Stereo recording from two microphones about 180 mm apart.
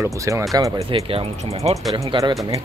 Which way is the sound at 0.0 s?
15° right (ahead or behind).